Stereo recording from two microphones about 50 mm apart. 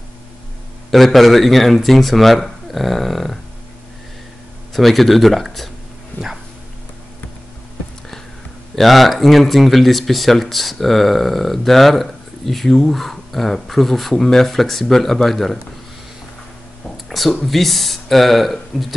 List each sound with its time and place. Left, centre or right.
0.8 s speech: centre
4.7 s speech: centre
6.1 s dog: left
8.7 s speech: centre
16.9 s a sound: centre
17.5 s speech: centre